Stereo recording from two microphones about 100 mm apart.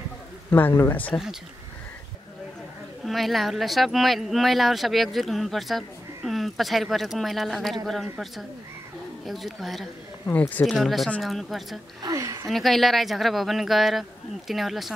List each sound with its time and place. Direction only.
0.5 s a man's voice: 20° left (ahead or behind)
3.1 s speech: centre (ahead or behind)
10.2 s a man's voice: 20° left (ahead or behind)
10.7 s speech: centre (ahead or behind)
12.0 s a woman's voice: 30° right (ahead or behind)
12.4 s speech: centre (ahead or behind)